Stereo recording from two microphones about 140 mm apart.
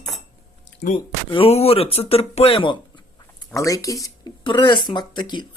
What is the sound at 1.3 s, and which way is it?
Speech, 45° left (ahead or behind).